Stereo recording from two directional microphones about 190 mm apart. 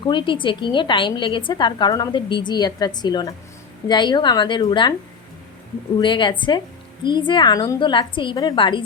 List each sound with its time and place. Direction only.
0.0 s a woman's voice: 25° left (ahead or behind)
6.0 s a woman's voice: 25° left (ahead or behind)